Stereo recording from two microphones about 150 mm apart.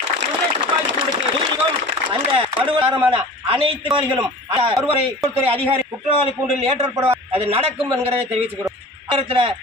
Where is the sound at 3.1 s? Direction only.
40° right (ahead or behind).